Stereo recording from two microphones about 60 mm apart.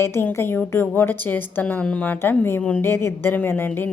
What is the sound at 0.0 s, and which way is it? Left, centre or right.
A woman's voice, left.